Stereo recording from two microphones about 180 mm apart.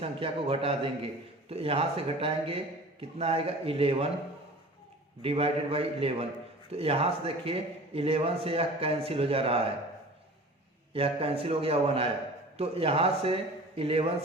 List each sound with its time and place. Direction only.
0.0 s a man's voice: 30° right (ahead or behind)
5.2 s a man's voice: 35° right (ahead or behind)
10.9 s a man's voice: 30° right (ahead or behind)